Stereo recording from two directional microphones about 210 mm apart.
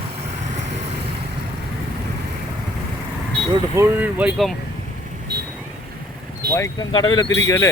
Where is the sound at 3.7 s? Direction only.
10° right (ahead or behind).